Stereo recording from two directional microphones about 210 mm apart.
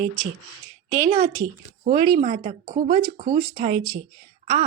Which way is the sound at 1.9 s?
20° right (ahead or behind).